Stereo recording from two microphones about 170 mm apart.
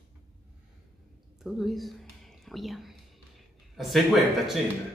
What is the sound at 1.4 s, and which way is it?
Speech, centre (ahead or behind).